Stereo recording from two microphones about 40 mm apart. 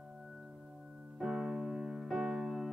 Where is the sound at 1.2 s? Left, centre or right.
Centre.